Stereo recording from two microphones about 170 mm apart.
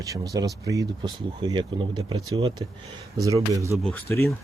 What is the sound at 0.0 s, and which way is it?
Speech, 20° right (ahead or behind).